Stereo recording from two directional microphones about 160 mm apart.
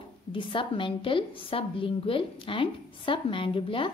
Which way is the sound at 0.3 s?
30° left (ahead or behind).